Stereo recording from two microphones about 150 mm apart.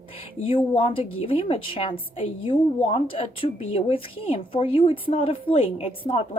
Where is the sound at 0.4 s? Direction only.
35° left (ahead or behind).